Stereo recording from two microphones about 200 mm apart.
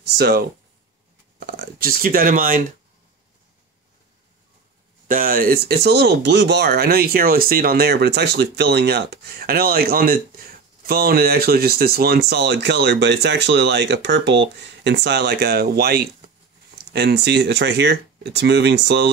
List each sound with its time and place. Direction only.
1.4 s speech: 50° right (ahead or behind)
5.0 s speech: 45° right (ahead or behind)